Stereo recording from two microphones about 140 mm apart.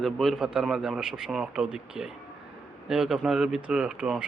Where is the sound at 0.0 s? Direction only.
Centre (ahead or behind).